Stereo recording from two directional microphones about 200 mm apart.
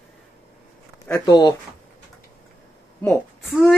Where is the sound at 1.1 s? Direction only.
15° left (ahead or behind).